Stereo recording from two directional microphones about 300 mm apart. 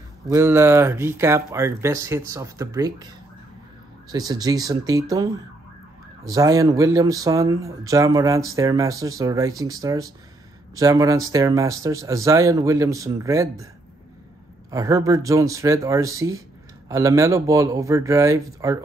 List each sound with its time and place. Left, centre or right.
0.3 s speech: centre
4.1 s speech: centre
6.2 s speech: centre
14.7 s speech: centre